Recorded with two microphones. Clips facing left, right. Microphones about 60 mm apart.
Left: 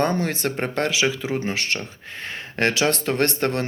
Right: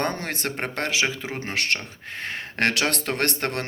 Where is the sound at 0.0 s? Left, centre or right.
Right.